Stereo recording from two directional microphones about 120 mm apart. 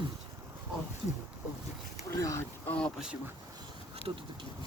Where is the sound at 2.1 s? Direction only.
25° left (ahead or behind).